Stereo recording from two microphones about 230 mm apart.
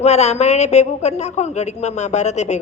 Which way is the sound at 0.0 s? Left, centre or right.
Left.